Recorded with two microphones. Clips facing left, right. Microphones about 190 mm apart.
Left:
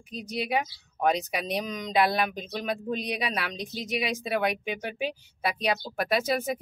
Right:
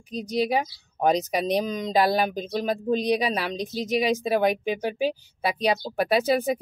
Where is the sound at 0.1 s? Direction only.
35° right (ahead or behind).